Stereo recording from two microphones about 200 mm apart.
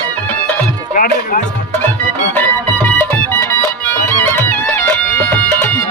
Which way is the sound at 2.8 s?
10° left (ahead or behind).